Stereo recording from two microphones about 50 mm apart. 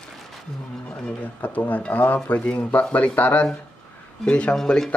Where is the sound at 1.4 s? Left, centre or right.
Left.